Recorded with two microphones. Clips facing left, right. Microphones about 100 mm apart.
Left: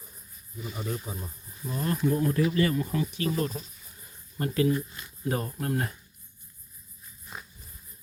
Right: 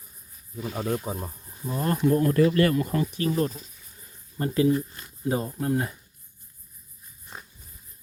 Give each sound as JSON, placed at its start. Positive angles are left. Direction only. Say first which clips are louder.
{"t": 0.5, "sound": "speech", "louder": "right 6 dB", "side_deg": -90}
{"t": 1.0, "sound": "speech", "louder": "right 6 dB", "side_deg": -55}
{"t": 1.5, "sound": "cricket", "louder": "right 2 dB", "side_deg": -25}
{"t": 2.0, "sound": "speech", "louder": "right 5 dB", "side_deg": -60}
{"t": 2.9, "sound": "speech", "louder": "right 3 dB", "side_deg": -45}
{"t": 3.2, "sound": "speech", "louder": "right 3 dB", "side_deg": -30}